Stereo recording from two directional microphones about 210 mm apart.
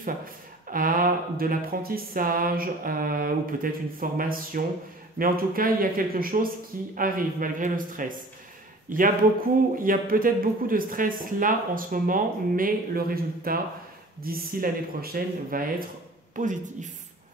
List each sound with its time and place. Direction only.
0.0 s speech: 40° right (ahead or behind)